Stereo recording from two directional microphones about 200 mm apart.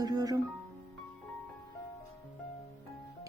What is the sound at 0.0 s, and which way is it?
Music, 20° right (ahead or behind).